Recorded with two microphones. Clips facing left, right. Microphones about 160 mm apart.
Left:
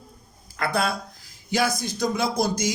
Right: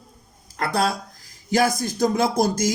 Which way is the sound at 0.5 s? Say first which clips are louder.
Right 2 dB; 35° right (ahead or behind).